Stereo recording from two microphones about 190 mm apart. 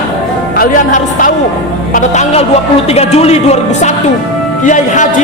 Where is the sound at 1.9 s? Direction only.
40° left (ahead or behind).